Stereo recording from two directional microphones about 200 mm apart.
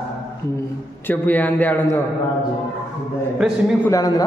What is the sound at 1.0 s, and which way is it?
A man's voice, 10° left (ahead or behind).